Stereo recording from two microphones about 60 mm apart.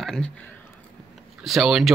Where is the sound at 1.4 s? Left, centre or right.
Centre.